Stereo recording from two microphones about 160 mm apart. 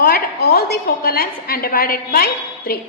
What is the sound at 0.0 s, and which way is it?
A woman's voice, 65° left (ahead or behind).